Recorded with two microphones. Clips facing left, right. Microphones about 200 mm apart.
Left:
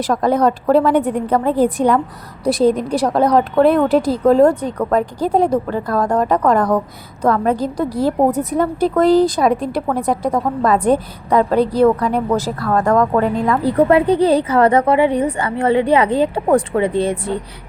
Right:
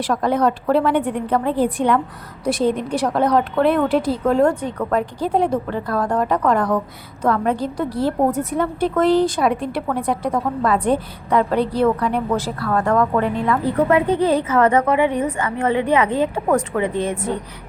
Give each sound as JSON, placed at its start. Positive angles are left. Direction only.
{"t": 0.0, "sound": "speech", "side_deg": 40}